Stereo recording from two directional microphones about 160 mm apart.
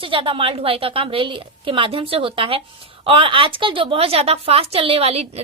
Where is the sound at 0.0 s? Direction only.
35° right (ahead or behind).